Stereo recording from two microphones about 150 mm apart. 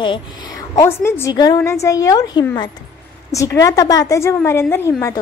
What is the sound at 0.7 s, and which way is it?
A woman's voice, 15° left (ahead or behind).